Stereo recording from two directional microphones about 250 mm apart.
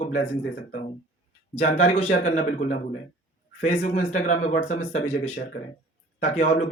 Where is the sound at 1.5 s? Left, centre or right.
Left.